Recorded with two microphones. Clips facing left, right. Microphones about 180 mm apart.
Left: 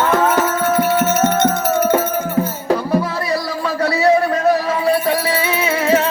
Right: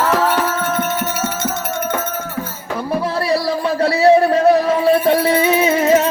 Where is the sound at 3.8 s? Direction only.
30° right (ahead or behind).